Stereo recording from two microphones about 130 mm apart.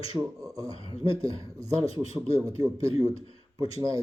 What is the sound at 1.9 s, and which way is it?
Speech, 50° left (ahead or behind).